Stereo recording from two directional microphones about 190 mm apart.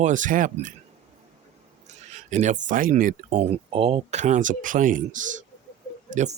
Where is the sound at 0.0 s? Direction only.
40° right (ahead or behind).